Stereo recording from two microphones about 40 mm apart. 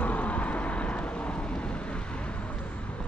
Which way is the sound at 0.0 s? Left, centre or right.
Left.